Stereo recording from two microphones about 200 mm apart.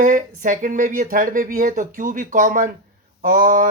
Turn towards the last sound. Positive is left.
turn(degrees=-45)  # may be behind; listen again after turning